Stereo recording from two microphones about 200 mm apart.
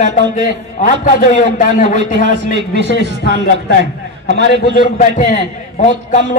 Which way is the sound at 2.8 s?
55° left (ahead or behind).